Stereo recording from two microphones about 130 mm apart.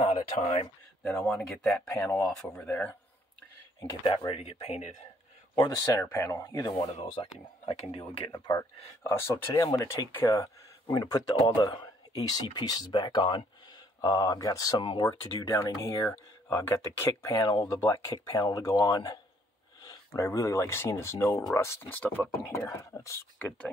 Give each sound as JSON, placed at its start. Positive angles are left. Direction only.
{"t": 0.0, "sound": "speech", "side_deg": 55}
{"t": 1.0, "sound": "speech", "side_deg": 5}
{"t": 1.9, "sound": "speech", "side_deg": 15}
{"t": 4.3, "sound": "speech", "side_deg": 55}
{"t": 5.6, "sound": "speech", "side_deg": 30}
{"t": 7.2, "sound": "speech", "side_deg": 45}
{"t": 8.3, "sound": "speech", "side_deg": 30}
{"t": 14.8, "sound": "speech", "side_deg": 40}
{"t": 15.5, "sound": "speech", "side_deg": 25}
{"t": 17.5, "sound": "speech", "side_deg": 35}
{"t": 19.8, "sound": "a sound", "side_deg": 30}
{"t": 20.2, "sound": "speech", "side_deg": 20}